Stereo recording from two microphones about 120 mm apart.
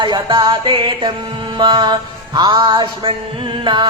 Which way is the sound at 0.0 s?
40° right (ahead or behind).